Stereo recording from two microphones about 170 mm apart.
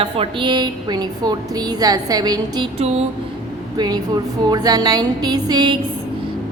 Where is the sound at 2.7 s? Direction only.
35° right (ahead or behind).